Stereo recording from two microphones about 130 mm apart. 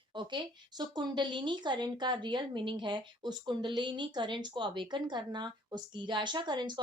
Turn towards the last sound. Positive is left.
turn(degrees=-35)  # may be behind; listen again after turning